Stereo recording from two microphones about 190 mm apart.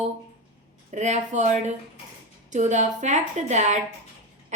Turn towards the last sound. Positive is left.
turn(degrees=-40)  # may be behind; listen again after turning